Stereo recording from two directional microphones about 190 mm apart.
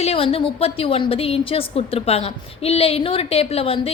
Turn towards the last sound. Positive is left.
turn(degrees=30)  # may be behind; listen again after turning